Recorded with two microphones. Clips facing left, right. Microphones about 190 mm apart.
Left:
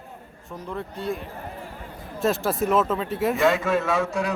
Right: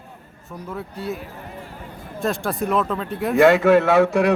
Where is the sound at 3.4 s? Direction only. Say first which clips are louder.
Right 10 dB; 65° right (ahead or behind).